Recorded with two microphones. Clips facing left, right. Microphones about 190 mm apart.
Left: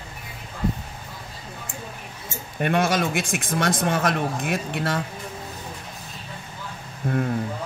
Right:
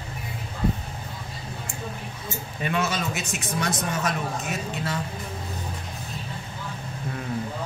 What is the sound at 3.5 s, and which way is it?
Speech, 65° left (ahead or behind).